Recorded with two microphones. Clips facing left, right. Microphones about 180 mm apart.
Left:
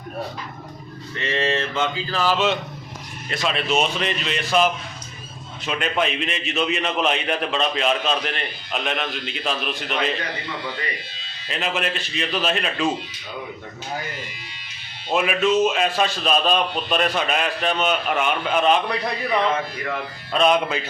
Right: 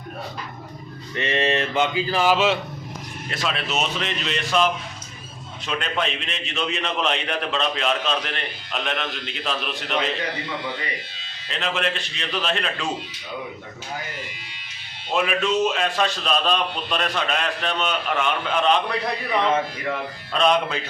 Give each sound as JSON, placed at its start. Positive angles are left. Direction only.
{"t": 1.1, "sound": "a man's voice", "side_deg": -20}
{"t": 11.4, "sound": "a man's voice", "side_deg": 5}
{"t": 15.1, "sound": "a man's voice", "side_deg": 5}
{"t": 20.3, "sound": "a man's voice", "side_deg": 5}